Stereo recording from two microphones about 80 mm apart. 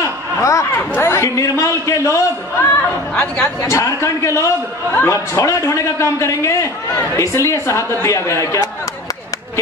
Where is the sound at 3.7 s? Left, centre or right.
Left.